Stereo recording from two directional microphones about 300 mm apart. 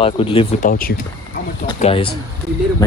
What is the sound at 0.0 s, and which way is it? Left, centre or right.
Speech, centre.